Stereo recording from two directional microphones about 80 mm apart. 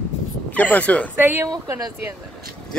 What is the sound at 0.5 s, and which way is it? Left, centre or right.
Speech, centre.